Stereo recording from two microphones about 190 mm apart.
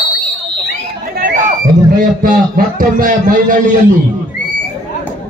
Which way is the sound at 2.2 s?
45° right (ahead or behind).